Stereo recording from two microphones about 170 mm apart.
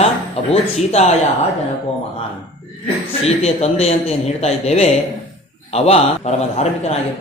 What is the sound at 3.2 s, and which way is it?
A man's voice, 40° left (ahead or behind).